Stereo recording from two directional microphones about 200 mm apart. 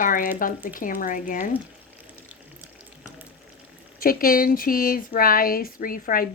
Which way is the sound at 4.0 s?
45° left (ahead or behind).